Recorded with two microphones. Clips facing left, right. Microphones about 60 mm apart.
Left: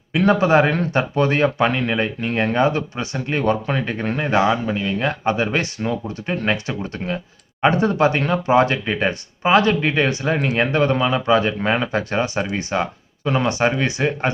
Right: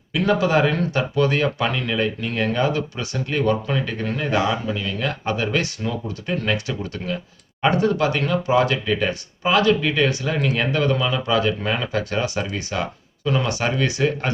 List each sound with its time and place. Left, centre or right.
0.1 s speech: left